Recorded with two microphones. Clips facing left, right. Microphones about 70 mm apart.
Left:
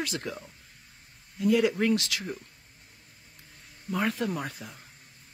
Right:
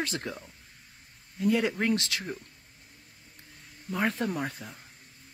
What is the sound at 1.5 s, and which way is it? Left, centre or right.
Speech, right.